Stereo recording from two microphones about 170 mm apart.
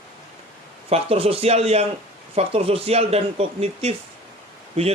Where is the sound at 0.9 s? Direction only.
35° right (ahead or behind).